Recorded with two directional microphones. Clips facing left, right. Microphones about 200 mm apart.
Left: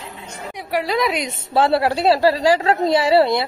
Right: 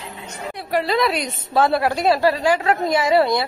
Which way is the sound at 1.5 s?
30° left (ahead or behind).